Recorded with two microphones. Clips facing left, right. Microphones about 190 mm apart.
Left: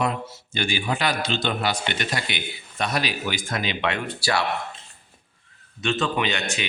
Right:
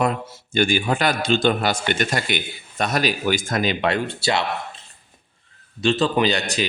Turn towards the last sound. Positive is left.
turn(degrees=-35)  # may be behind; listen again after turning